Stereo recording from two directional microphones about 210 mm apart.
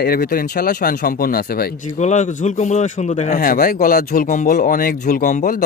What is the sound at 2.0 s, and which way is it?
Speech, 35° left (ahead or behind).